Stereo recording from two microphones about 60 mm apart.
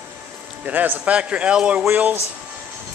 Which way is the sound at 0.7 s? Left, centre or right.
Right.